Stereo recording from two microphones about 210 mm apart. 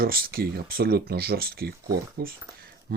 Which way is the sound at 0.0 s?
45° right (ahead or behind).